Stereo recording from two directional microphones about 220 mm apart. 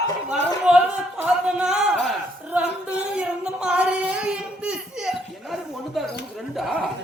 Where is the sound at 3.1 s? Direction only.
5° right (ahead or behind).